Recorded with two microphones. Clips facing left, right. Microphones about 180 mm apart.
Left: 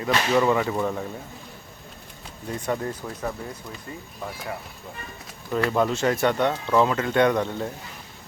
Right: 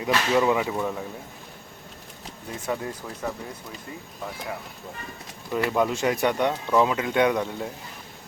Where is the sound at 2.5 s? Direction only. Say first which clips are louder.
Left 2 dB; 5° right (ahead or behind).